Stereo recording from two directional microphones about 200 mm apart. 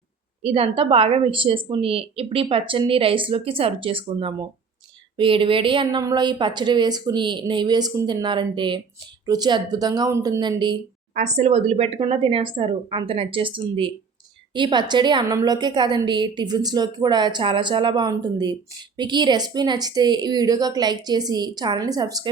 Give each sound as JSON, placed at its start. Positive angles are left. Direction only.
{"t": 0.4, "sound": "a woman's voice", "side_deg": -30}
{"t": 11.1, "sound": "a woman's voice", "side_deg": -35}